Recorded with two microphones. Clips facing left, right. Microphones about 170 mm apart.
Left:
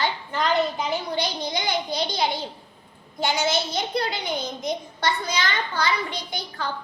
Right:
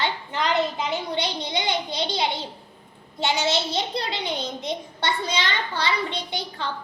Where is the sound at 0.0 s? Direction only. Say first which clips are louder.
Left 1 dB; 20° right (ahead or behind).